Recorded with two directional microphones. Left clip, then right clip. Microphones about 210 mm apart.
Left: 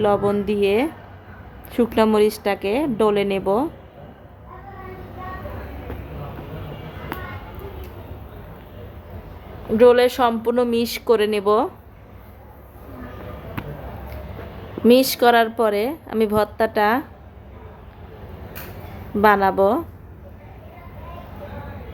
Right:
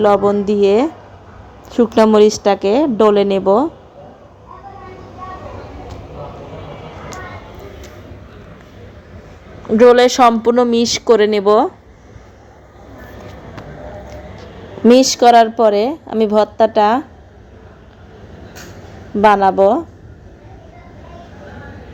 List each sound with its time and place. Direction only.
0.0 s a woman's voice: 15° right (ahead or behind)
9.7 s speech: 25° right (ahead or behind)
14.8 s a woman's voice: 15° right (ahead or behind)
19.2 s a woman's voice: 10° right (ahead or behind)